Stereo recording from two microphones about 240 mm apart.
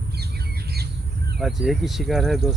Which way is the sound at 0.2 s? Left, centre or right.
Right.